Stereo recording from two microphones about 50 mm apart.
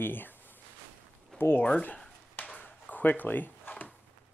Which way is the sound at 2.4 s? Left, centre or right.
Left.